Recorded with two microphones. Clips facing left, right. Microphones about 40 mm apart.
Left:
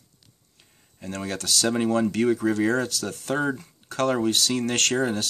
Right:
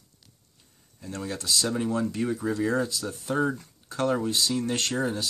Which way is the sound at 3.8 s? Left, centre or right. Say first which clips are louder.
Left 3 dB; left.